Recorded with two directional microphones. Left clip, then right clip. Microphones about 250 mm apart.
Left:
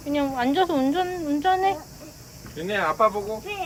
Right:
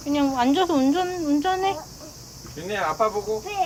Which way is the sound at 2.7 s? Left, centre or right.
Left.